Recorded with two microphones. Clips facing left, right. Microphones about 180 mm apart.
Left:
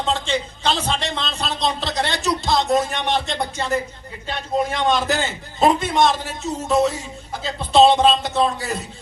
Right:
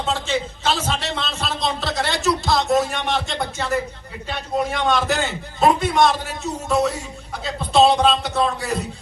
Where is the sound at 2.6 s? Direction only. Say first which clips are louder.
Even; centre (ahead or behind).